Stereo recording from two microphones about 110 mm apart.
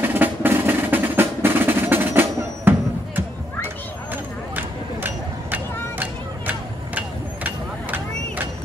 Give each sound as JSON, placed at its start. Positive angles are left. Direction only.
{"t": 0.0, "sound": "music", "side_deg": -20}
{"t": 3.6, "sound": "a sound", "side_deg": -20}
{"t": 7.0, "sound": "vehicle", "side_deg": -15}